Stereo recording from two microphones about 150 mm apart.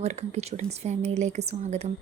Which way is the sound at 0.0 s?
45° right (ahead or behind).